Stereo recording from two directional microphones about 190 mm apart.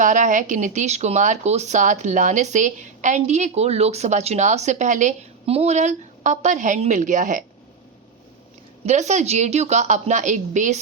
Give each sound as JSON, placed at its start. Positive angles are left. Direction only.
{"t": 0.0, "sound": "speech", "side_deg": -40}
{"t": 8.9, "sound": "speech", "side_deg": -40}